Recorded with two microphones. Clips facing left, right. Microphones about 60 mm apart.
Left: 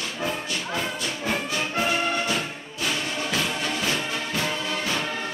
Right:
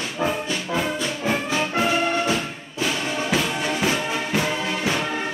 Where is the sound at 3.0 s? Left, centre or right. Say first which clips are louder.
Right 4 dB; centre.